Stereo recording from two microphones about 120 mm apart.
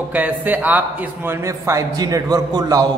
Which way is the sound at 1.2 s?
25° right (ahead or behind).